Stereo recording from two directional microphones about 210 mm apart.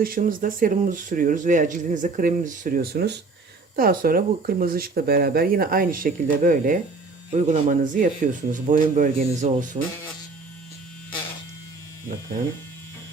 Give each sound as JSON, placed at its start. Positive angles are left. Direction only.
{"t": 0.0, "sound": "speech", "side_deg": -40}